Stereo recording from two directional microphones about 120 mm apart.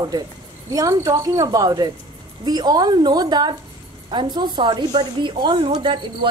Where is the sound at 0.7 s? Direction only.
30° right (ahead or behind).